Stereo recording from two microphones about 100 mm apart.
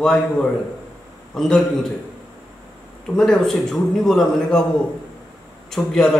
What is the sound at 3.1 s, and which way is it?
A man's voice, 5° left (ahead or behind).